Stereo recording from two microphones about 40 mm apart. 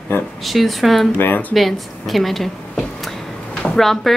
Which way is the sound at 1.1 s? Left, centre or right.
Left.